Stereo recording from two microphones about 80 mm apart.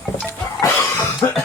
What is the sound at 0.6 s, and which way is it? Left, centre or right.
Cough, left.